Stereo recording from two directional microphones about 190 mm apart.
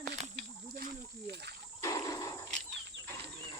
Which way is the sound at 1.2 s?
60° right (ahead or behind).